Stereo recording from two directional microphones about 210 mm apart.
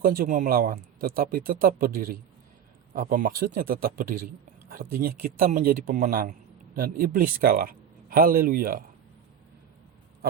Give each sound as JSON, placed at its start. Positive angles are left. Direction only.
{"t": 0.0, "sound": "speech", "side_deg": -40}